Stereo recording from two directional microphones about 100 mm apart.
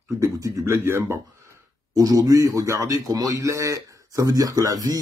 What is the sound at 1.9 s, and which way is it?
Speech, 40° right (ahead or behind).